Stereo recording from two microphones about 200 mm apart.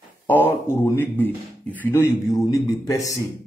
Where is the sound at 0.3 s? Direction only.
10° left (ahead or behind).